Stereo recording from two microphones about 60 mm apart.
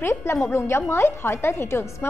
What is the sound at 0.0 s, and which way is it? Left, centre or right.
A woman's voice, left.